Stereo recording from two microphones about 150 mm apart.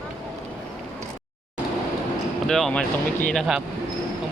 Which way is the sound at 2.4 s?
5° left (ahead or behind).